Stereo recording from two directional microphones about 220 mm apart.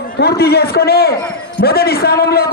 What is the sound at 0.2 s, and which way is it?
A man's voice, 45° left (ahead or behind).